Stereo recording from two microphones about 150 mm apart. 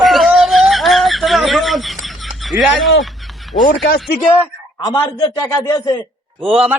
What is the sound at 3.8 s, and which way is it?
Speech, 90° left.